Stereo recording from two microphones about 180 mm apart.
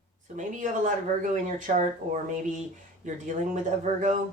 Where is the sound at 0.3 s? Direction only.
45° right (ahead or behind).